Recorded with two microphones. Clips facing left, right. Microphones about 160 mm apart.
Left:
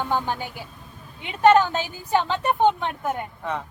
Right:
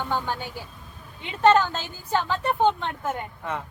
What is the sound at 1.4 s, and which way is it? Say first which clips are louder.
Speech: left 2 dB; 10° left (ahead or behind).